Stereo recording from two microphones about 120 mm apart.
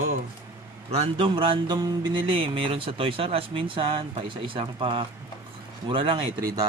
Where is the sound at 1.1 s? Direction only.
45° right (ahead or behind).